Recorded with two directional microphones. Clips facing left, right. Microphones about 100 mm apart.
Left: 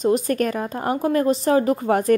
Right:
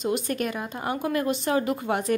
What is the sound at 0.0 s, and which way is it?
A woman's voice, 40° left (ahead or behind).